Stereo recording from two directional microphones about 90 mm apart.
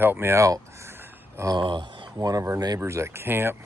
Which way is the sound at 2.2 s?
40° right (ahead or behind).